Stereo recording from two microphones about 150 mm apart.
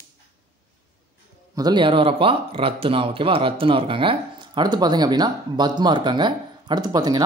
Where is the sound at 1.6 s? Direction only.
30° right (ahead or behind).